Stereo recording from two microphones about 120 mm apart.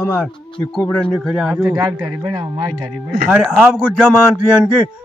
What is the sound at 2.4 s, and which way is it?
Speech, 35° right (ahead or behind).